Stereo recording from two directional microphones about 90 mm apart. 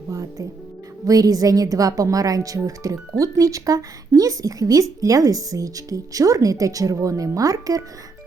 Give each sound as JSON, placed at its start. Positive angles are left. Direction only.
{"t": 0.1, "sound": "music", "side_deg": -35}
{"t": 1.0, "sound": "speech", "side_deg": -45}